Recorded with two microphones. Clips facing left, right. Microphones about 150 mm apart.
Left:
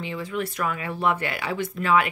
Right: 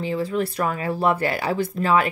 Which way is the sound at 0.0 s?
35° right (ahead or behind).